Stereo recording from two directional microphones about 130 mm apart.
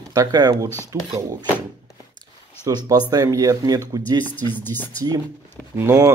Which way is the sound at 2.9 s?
30° right (ahead or behind).